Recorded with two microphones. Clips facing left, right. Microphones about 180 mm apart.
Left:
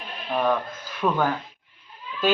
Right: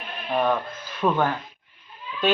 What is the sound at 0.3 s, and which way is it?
Speech, 10° right (ahead or behind).